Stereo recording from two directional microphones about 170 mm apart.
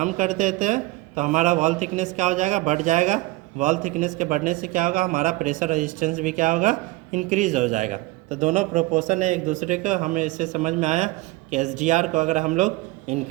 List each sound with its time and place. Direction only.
0.0 s a man's voice: 50° right (ahead or behind)